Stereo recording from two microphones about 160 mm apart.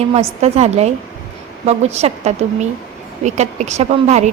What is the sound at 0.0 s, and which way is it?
A woman's voice, 40° right (ahead or behind).